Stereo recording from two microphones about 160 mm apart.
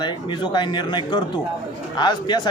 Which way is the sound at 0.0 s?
30° left (ahead or behind).